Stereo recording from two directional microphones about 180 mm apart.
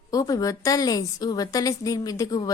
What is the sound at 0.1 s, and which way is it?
A woman's voice, 20° left (ahead or behind).